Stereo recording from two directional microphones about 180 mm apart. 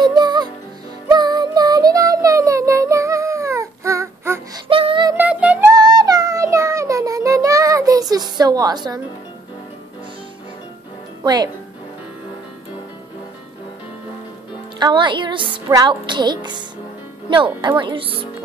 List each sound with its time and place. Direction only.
0.0 s music: 25° right (ahead or behind)
4.6 s music: 30° right (ahead or behind)
5.1 s music: 10° right (ahead or behind)
5.7 s music: 20° right (ahead or behind)
11.2 s speech: 20° right (ahead or behind)
14.8 s speech: 25° right (ahead or behind)
17.6 s speech: 25° right (ahead or behind)